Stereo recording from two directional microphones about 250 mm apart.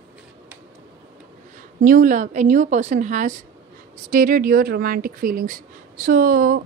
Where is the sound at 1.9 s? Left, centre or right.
Right.